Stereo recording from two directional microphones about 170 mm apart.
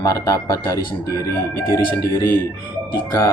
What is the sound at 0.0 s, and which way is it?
Speech, 20° left (ahead or behind).